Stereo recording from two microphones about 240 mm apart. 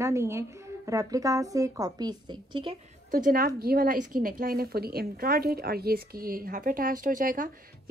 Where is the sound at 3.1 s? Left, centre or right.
Right.